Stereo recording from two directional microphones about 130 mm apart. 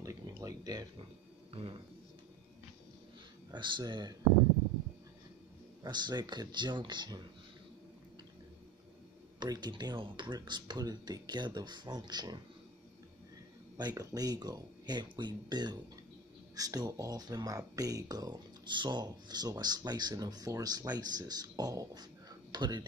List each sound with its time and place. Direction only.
0.0 s a sound: 25° right (ahead or behind)
1.5 s speech: 45° right (ahead or behind)
3.5 s speech: 35° right (ahead or behind)
5.9 s speech: 35° right (ahead or behind)
9.4 s speech: 35° right (ahead or behind)
13.7 s speech: 30° right (ahead or behind)